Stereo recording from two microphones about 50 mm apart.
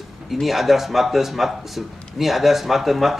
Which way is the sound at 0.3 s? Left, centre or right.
Centre.